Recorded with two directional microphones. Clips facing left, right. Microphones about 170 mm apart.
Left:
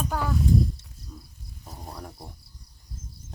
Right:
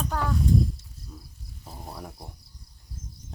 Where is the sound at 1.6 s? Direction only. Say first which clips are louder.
Even; 5° right (ahead or behind).